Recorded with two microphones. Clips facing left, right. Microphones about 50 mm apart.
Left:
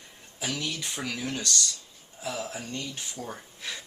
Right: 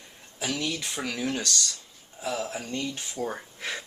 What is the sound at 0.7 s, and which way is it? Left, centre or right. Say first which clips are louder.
Speech: right 2 dB; right.